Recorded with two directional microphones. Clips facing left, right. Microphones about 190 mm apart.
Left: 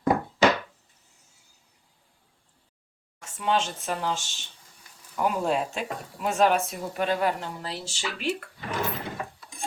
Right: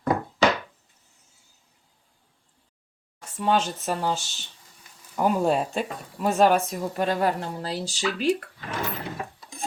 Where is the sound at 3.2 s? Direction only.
40° right (ahead or behind).